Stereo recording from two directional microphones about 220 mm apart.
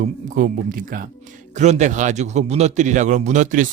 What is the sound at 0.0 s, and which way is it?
A man's voice, 35° right (ahead or behind).